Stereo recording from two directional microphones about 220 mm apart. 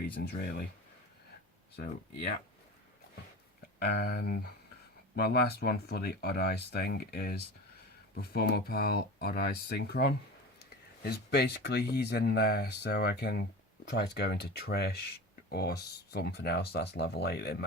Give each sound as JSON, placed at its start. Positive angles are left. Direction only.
{"t": 0.2, "sound": "speech", "side_deg": 45}
{"t": 3.8, "sound": "speech", "side_deg": 45}